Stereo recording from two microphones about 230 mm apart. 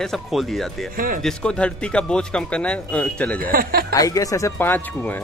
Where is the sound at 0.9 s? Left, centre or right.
Right.